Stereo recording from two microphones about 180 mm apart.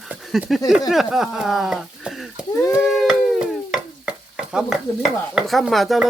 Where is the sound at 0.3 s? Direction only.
Centre (ahead or behind).